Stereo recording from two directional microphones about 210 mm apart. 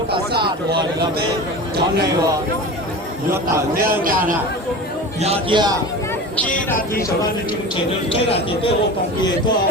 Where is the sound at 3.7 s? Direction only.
40° right (ahead or behind).